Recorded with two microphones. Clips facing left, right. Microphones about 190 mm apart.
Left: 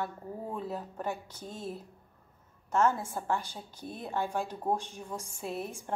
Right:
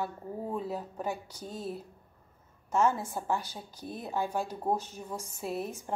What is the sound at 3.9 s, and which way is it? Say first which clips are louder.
A woman's voice: right 1 dB; 5° right (ahead or behind).